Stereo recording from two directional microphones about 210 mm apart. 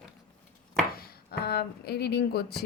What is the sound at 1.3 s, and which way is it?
A woman's voice, 50° left (ahead or behind).